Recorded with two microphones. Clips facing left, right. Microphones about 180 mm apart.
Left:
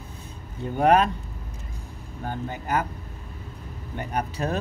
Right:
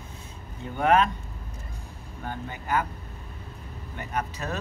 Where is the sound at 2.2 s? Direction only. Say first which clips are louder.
Left 3 dB; 40° left (ahead or behind).